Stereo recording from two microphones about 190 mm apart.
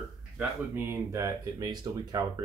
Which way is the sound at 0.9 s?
15° right (ahead or behind).